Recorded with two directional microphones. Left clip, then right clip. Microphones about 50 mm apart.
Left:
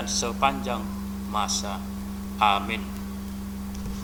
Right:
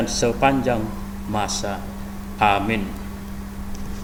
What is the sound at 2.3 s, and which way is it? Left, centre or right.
Speech, right.